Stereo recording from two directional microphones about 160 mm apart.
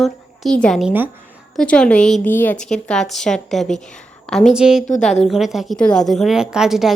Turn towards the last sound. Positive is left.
turn(degrees=-5)  # may be behind; listen again after turning